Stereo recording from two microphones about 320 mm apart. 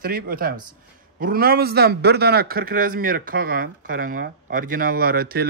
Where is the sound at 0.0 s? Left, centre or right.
Right.